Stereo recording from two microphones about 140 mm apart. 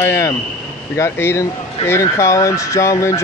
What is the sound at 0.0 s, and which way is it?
Speech, 20° left (ahead or behind).